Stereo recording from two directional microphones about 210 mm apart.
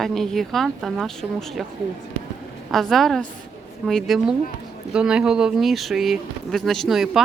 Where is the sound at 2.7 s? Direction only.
Centre (ahead or behind).